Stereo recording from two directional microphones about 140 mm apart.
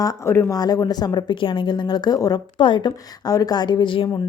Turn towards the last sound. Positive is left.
turn(degrees=35)  # may be behind; listen again after turning